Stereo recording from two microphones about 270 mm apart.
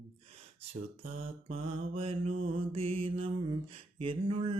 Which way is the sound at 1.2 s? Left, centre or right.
Right.